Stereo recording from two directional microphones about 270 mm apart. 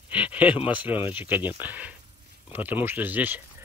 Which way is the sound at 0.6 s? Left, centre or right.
Centre.